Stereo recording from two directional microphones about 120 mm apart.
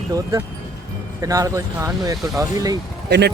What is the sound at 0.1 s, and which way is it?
Speech, 30° right (ahead or behind).